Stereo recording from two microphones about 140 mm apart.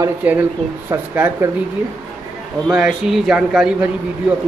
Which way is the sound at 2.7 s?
5° right (ahead or behind).